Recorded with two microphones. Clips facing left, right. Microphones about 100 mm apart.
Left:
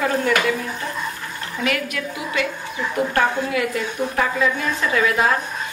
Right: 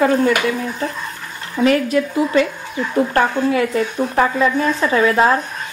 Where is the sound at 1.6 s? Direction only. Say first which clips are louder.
Right 10 dB; 35° right (ahead or behind).